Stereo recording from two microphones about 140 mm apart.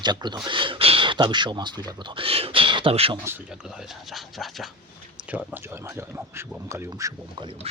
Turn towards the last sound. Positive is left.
turn(degrees=-25)  # may be behind; listen again after turning